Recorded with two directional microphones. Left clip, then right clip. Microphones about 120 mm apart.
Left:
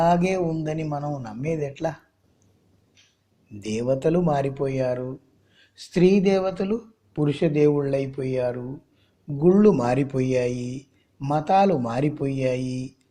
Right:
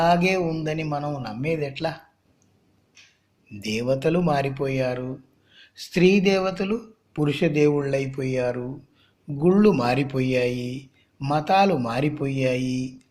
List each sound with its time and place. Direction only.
0.0 s a man's voice: 45° left (ahead or behind)
3.5 s a man's voice: 40° left (ahead or behind)